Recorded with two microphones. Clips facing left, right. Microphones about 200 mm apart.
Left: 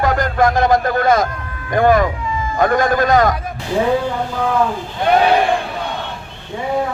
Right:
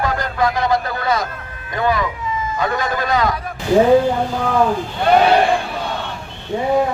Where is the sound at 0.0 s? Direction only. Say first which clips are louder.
Left 4 dB; 50° left (ahead or behind).